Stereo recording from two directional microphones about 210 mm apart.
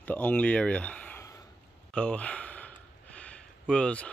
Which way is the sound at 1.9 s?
5° left (ahead or behind).